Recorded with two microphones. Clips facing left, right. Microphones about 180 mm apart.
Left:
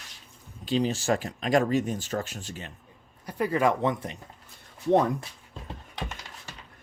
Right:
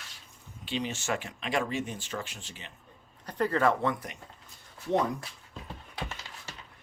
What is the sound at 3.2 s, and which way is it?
Speech, 10° left (ahead or behind).